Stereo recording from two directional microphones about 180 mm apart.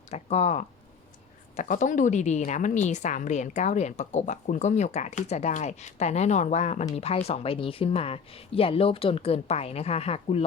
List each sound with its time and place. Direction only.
0.1 s a woman's voice: 35° left (ahead or behind)